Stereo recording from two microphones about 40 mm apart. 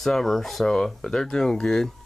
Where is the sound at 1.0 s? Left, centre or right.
Centre.